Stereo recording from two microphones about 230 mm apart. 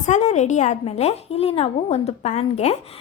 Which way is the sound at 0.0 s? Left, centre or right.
Left.